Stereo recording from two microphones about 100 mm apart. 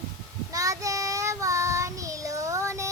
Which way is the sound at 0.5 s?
35° right (ahead or behind).